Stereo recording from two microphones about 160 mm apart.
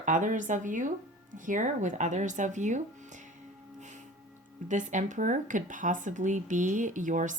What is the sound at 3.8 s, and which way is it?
Music, 50° right (ahead or behind).